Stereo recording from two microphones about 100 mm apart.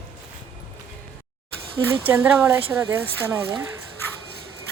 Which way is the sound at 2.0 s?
25° right (ahead or behind).